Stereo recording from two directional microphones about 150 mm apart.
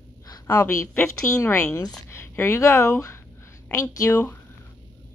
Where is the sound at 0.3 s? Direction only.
20° left (ahead or behind).